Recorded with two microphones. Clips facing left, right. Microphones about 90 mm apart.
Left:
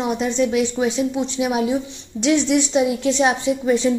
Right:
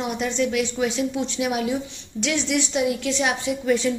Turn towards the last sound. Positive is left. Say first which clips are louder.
# left 4 dB
turn(degrees=25)  # may be behind; listen again after turning